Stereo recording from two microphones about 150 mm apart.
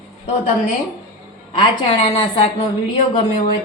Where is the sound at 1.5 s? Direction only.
30° left (ahead or behind).